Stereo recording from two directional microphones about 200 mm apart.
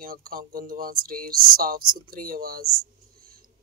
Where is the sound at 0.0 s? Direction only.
45° right (ahead or behind).